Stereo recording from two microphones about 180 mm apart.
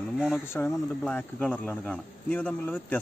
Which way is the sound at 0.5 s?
10° left (ahead or behind).